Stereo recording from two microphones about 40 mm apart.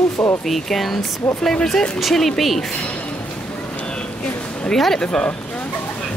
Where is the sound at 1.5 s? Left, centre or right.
Centre.